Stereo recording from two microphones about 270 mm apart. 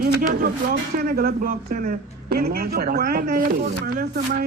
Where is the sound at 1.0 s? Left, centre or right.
Right.